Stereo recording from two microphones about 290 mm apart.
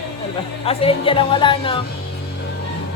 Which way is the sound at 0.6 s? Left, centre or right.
Centre.